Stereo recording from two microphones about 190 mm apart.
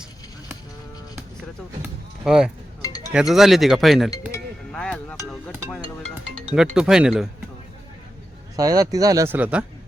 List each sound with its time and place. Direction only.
1.8 s a sound: 5° right (ahead or behind)
3.1 s speech: centre (ahead or behind)
4.3 s music: 5° left (ahead or behind)
6.7 s speech: 5° right (ahead or behind)
8.5 s speech: 20° right (ahead or behind)